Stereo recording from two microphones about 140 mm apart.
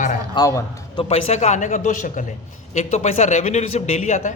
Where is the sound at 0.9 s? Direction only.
50° left (ahead or behind).